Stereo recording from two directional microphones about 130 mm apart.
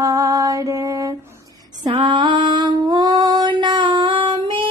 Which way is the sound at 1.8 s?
35° right (ahead or behind).